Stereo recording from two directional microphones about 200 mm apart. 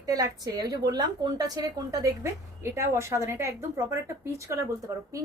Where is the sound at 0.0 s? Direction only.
20° right (ahead or behind).